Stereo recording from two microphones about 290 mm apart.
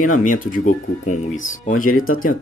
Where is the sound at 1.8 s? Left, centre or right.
Left.